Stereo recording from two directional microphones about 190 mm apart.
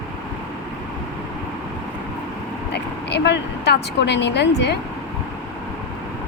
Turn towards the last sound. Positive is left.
turn(degrees=65)  # may be behind; listen again after turning